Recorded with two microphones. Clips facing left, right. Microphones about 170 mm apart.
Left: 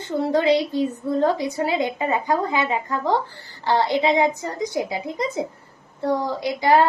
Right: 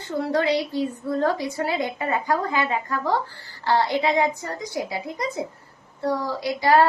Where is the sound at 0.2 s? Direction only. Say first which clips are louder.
Left 3 dB; 20° left (ahead or behind).